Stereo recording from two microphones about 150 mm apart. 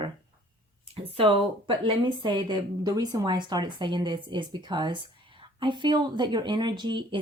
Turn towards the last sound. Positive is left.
turn(degrees=-30)  # may be behind; listen again after turning